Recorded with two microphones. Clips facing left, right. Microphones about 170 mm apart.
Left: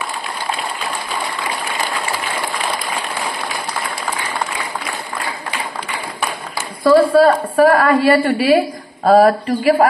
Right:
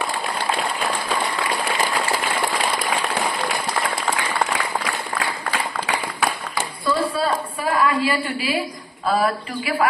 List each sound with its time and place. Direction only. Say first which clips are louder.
6.8 s a woman's voice: left 12 dB; 55° left (ahead or behind)